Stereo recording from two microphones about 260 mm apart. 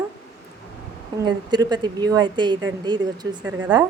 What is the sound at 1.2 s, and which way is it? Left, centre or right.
A woman's voice, centre.